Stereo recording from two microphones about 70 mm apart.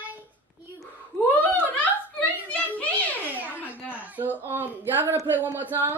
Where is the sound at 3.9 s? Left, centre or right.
Right.